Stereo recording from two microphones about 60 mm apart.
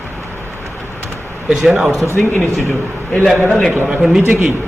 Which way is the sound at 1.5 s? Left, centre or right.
Centre.